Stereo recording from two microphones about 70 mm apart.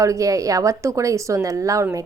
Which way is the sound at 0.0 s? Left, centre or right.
Right.